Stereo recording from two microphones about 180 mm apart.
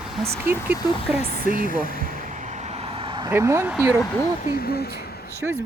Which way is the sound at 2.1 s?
45° right (ahead or behind).